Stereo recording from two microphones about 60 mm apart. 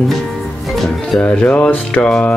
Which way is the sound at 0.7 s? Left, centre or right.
Centre.